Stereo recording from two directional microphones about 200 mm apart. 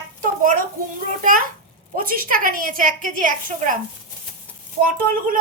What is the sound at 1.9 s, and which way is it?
A woman's voice, 45° right (ahead or behind).